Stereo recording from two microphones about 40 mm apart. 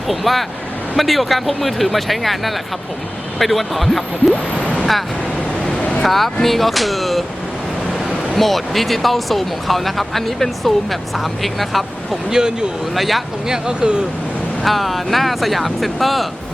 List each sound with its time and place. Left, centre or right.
0.1 s speech: centre
4.5 s a sound: left
6.0 s speech: centre
8.4 s speech: centre
12.3 s speech: centre
13.0 s speech: centre
13.5 s speech: centre
14.6 s speech: centre